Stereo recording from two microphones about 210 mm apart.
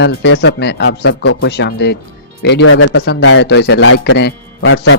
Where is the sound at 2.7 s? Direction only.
85° left.